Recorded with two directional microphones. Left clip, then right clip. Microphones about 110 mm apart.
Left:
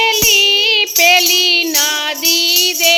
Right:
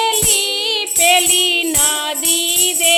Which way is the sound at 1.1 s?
Centre (ahead or behind).